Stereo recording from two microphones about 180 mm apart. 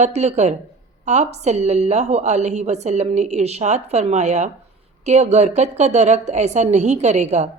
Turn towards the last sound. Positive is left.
turn(degrees=-40)  # may be behind; listen again after turning